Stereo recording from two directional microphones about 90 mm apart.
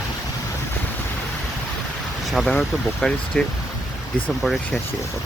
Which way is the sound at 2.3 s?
Centre (ahead or behind).